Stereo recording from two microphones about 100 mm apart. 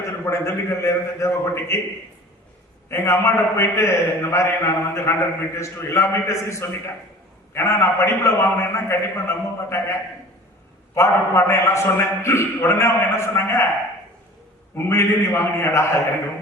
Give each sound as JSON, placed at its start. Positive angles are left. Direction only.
{"t": 0.0, "sound": "a man's voice", "side_deg": 30}
{"t": 2.9, "sound": "a man's voice", "side_deg": 25}
{"t": 10.9, "sound": "a man's voice", "side_deg": 30}
{"t": 14.8, "sound": "a man's voice", "side_deg": 25}